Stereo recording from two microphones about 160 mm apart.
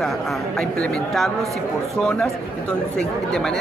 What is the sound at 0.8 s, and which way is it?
A woman's voice, centre (ahead or behind).